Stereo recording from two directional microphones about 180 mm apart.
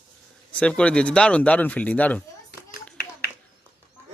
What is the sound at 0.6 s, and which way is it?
Speech, 5° left (ahead or behind).